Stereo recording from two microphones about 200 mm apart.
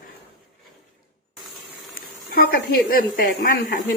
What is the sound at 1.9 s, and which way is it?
Speech, 50° left (ahead or behind).